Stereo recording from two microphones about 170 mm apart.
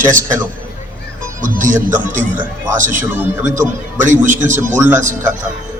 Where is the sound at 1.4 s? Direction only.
50° right (ahead or behind).